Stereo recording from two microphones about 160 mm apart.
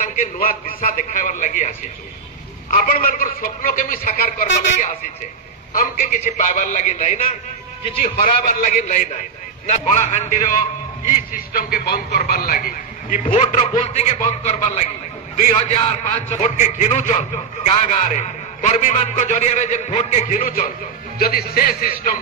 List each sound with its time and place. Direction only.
0.0 s a man's voice: 60° left (ahead or behind)
2.7 s a man's voice: 60° left (ahead or behind)
5.8 s a man's voice: 55° left (ahead or behind)
11.3 s speech: 65° left (ahead or behind); by 12.2 s 85° left
12.3 s a man's voice: 65° left (ahead or behind)
13.2 s a man's voice: 40° left (ahead or behind); by 20.7 s 55° left (ahead or behind)
21.2 s speech: 70° left (ahead or behind)